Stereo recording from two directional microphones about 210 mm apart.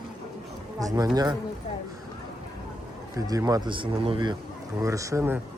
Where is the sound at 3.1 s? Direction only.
15° right (ahead or behind).